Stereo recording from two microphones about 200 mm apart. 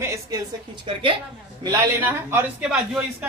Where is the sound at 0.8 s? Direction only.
25° right (ahead or behind).